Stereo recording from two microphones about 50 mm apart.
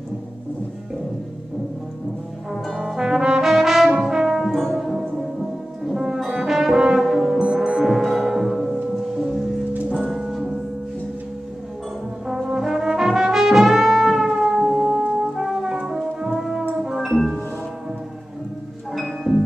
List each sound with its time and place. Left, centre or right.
2.9 s trombone: centre
4.1 s brass instrument: centre
4.5 s music: centre
4.7 s brass instrument: centre
7.5 s music: centre
9.9 s music: centre
12.4 s brass instrument: centre
15.7 s music: centre
18.9 s music: centre